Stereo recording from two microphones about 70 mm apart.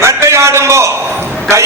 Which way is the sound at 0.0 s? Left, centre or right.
Right.